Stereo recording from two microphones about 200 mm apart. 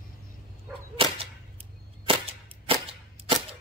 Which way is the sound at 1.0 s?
25° right (ahead or behind).